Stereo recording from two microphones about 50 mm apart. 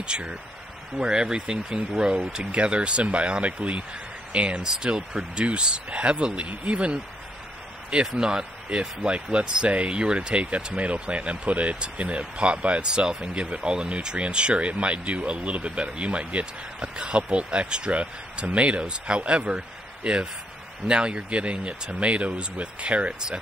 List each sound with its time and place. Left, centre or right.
0.0 s speech: centre